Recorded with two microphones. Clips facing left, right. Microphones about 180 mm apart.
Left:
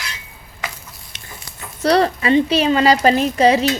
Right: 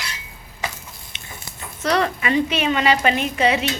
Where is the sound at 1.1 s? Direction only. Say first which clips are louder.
Left 1 dB; 40° left (ahead or behind).